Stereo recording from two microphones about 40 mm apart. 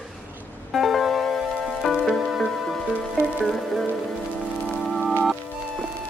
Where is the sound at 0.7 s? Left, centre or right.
Centre.